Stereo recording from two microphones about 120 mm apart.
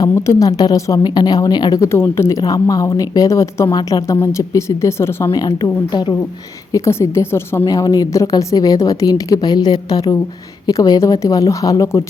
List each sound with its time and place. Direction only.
0.0 s a woman's voice: 25° left (ahead or behind)
6.7 s a woman's voice: 25° left (ahead or behind)
7.7 s a woman's voice: 30° left (ahead or behind)